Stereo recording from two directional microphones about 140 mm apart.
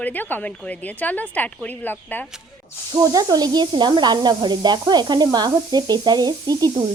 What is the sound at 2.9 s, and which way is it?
Speech, 25° right (ahead or behind).